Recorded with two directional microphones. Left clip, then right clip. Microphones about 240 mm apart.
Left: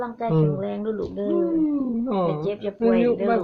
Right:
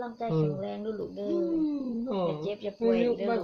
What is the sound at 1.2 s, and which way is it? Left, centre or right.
Speech, centre.